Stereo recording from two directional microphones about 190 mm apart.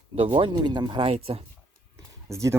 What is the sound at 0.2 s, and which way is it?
Speech, 25° right (ahead or behind).